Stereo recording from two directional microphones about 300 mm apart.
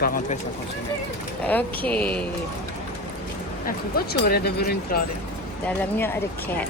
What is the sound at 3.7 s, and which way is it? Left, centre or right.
Speech, left.